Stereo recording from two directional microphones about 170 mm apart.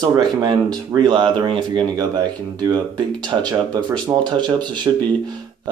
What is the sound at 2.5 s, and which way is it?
Speech, 25° right (ahead or behind).